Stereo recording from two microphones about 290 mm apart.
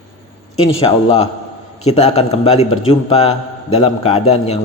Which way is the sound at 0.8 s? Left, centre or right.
Centre.